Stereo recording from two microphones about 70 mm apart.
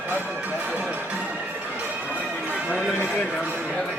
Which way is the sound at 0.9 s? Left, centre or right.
Right.